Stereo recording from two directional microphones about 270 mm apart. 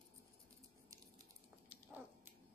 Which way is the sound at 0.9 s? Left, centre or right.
Centre.